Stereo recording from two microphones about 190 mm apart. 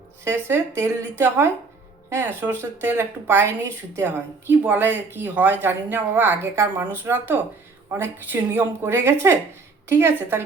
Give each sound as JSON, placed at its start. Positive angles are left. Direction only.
{"t": 0.3, "sound": "speech", "side_deg": -15}